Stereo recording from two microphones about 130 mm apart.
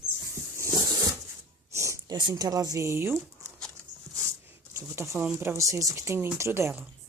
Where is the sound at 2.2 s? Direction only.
35° right (ahead or behind).